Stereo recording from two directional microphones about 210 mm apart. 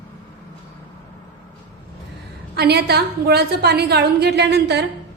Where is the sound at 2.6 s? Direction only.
50° right (ahead or behind).